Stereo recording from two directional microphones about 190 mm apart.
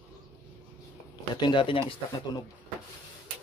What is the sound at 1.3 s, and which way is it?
Speech, 25° left (ahead or behind).